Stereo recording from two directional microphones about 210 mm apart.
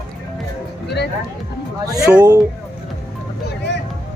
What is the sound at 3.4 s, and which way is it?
Vehicle, 55° left (ahead or behind).